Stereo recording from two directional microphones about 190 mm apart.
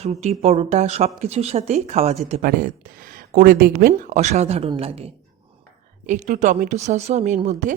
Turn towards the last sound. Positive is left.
turn(degrees=-40)  # may be behind; listen again after turning